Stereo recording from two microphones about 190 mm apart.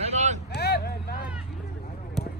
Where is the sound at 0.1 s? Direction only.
35° right (ahead or behind).